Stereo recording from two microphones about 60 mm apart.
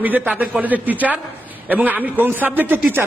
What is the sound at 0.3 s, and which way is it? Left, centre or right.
A man's voice, right.